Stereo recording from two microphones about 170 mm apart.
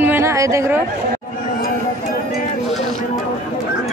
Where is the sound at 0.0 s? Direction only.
15° right (ahead or behind).